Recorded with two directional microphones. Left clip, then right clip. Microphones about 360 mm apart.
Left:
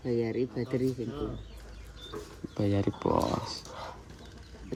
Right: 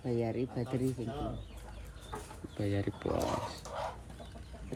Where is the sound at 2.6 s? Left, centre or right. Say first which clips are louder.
Left 6 dB; centre.